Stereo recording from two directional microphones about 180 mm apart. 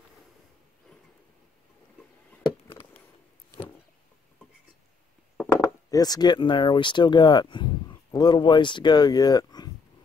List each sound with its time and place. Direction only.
5.9 s speech: 20° left (ahead or behind)